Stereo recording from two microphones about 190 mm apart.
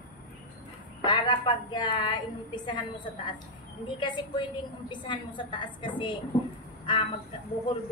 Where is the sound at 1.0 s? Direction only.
25° left (ahead or behind).